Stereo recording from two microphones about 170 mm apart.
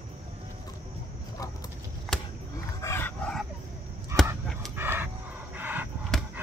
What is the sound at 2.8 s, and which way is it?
Dog, 15° left (ahead or behind).